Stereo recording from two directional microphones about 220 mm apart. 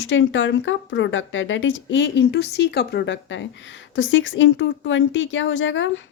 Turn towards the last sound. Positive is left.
turn(degrees=60)  # may be behind; listen again after turning